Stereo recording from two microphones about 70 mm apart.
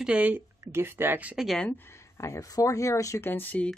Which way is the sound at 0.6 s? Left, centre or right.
Right.